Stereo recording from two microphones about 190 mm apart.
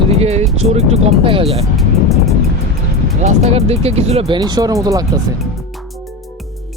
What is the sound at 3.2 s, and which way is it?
Speech, 35° right (ahead or behind).